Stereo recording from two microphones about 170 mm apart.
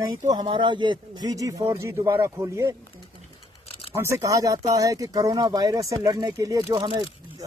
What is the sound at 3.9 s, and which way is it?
Speech, 15° right (ahead or behind).